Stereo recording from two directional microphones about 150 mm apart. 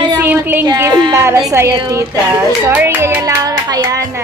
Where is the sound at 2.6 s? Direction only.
15° right (ahead or behind).